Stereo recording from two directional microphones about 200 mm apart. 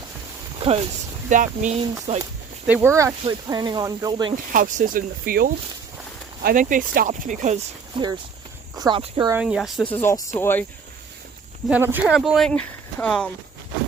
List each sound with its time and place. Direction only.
0.6 s speech: 30° right (ahead or behind)
1.3 s speech: 40° right (ahead or behind)
2.6 s speech: 10° right (ahead or behind)
4.5 s speech: 40° right (ahead or behind)
7.9 s speech: 25° right (ahead or behind)
9.4 s speech: centre (ahead or behind)
11.7 s speech: 10° right (ahead or behind)